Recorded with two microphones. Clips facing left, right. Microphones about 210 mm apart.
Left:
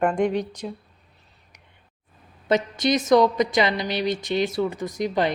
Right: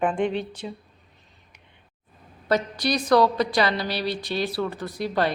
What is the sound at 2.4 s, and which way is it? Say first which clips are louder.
A woman's voice: left 2 dB; 20° left (ahead or behind).